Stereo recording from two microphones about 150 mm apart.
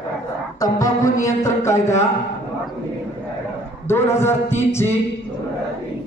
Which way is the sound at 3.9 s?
15° left (ahead or behind).